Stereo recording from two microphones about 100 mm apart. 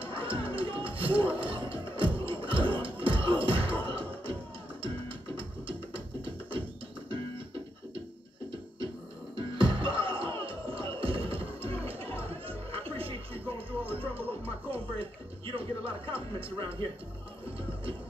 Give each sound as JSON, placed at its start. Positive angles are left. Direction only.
{"t": 0.0, "sound": "music", "side_deg": -60}
{"t": 9.3, "sound": "music", "side_deg": -55}